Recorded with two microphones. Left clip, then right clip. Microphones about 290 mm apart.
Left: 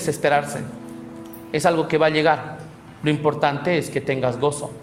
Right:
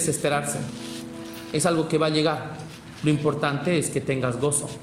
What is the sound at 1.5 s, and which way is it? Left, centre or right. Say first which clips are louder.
A man's voice: left 4 dB; centre.